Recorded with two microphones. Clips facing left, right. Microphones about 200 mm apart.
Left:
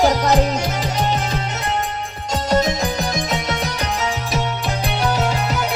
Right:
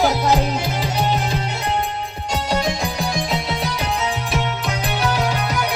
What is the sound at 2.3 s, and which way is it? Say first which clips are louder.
Music: left 4 dB; 45° left (ahead or behind).